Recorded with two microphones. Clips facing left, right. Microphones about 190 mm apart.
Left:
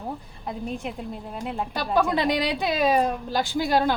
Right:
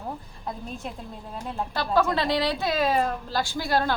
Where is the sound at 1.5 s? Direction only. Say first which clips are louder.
Even; 15° left (ahead or behind).